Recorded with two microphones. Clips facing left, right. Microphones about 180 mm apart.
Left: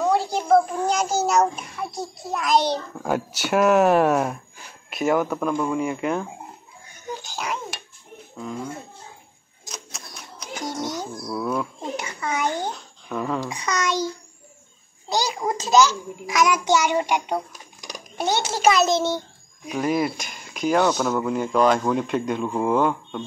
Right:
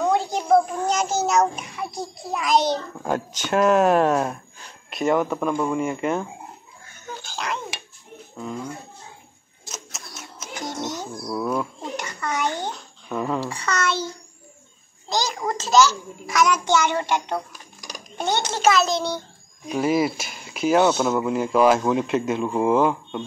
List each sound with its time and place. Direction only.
0.0 s a sound: 5° left (ahead or behind)
0.4 s speech: centre (ahead or behind)
7.2 s speech: 10° left (ahead or behind)
9.7 s typewriter: centre (ahead or behind)
10.6 s music: 10° left (ahead or behind)
11.2 s speech: 5° right (ahead or behind)
12.0 s speech: 10° left (ahead or behind)
13.1 s speech: 5° right (ahead or behind)
13.5 s speech: 15° left (ahead or behind)
15.0 s a child's voice: 10° left (ahead or behind)
18.1 s speech: 10° left (ahead or behind)
19.7 s speech: 5° right (ahead or behind)